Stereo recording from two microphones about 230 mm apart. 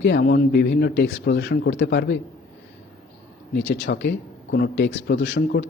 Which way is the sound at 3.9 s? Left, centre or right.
Left.